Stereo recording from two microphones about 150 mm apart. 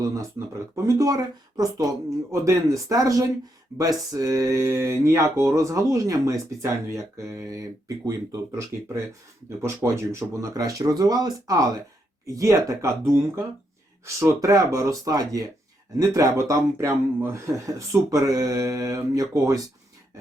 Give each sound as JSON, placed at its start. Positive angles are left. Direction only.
{"t": 0.9, "sound": "speech", "side_deg": -20}
{"t": 8.0, "sound": "speech", "side_deg": -20}